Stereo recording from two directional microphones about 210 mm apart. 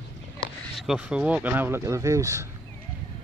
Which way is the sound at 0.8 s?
5° right (ahead or behind).